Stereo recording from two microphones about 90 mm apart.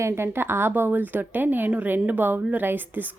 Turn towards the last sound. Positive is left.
turn(degrees=-20)  # may be behind; listen again after turning